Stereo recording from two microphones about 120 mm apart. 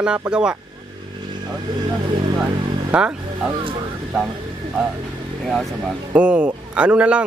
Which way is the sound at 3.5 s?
50° right (ahead or behind).